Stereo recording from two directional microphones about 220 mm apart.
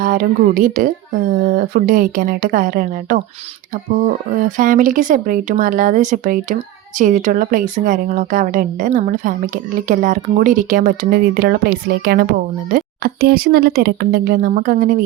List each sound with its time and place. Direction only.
0.0 s speech: 40° right (ahead or behind)